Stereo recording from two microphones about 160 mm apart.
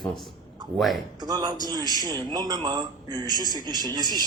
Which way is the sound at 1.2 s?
25° right (ahead or behind).